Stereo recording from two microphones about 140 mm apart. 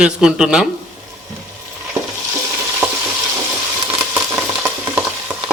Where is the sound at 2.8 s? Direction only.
15° right (ahead or behind).